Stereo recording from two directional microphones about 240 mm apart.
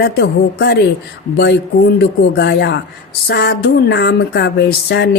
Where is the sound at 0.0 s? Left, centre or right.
Left.